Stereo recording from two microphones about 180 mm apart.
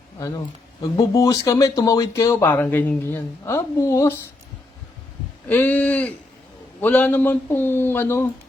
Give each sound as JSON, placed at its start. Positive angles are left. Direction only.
{"t": 0.2, "sound": "speech", "side_deg": 20}
{"t": 5.5, "sound": "speech", "side_deg": 10}